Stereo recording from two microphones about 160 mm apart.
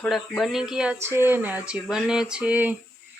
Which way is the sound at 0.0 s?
Centre (ahead or behind).